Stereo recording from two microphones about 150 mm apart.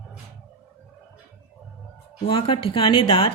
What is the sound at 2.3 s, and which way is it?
Speech, 35° left (ahead or behind).